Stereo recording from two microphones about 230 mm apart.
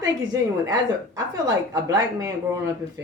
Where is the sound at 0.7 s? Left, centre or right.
Centre.